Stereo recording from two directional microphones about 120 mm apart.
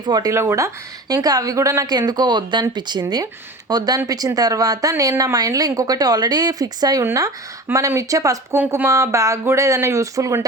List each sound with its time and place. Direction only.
0.0 s speech: 35° right (ahead or behind)